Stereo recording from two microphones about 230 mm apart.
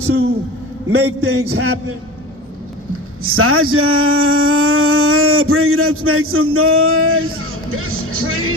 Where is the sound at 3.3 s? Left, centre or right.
Right.